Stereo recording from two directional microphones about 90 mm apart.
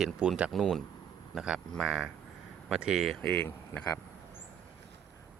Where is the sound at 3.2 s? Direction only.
15° left (ahead or behind).